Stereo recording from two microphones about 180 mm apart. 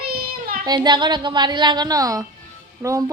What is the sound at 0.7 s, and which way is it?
A child's voice, 25° right (ahead or behind).